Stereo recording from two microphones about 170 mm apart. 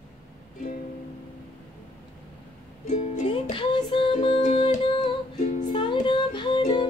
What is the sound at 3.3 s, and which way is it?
Music, 30° left (ahead or behind).